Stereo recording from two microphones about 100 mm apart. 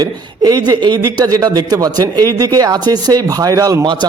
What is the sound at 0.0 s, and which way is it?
A man's voice, 40° right (ahead or behind).